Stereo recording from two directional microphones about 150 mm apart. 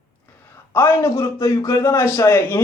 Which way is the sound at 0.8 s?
20° left (ahead or behind).